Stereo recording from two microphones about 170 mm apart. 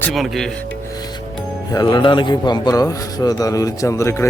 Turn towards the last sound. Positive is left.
turn(degrees=15)  # may be behind; listen again after turning